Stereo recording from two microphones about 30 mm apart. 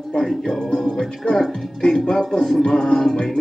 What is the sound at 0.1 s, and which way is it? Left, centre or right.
Speech, left.